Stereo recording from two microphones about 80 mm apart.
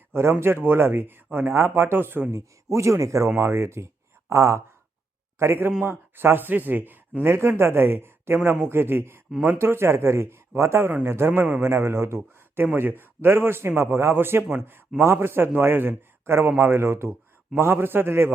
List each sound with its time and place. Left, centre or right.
0.1 s speech: right
2.3 s a man's voice: right; by 11.7 s centre
11.7 s speech: right